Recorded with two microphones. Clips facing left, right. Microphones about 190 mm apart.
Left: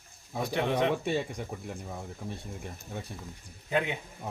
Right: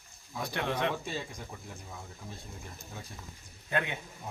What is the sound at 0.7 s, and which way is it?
Speech, 65° left (ahead or behind).